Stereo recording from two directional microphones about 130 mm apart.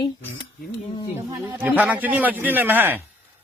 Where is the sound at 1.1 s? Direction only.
25° right (ahead or behind).